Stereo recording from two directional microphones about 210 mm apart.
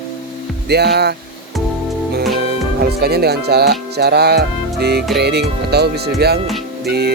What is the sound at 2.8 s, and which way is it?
Speech, 50° right (ahead or behind).